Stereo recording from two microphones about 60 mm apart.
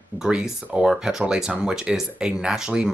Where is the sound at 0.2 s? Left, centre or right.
Centre.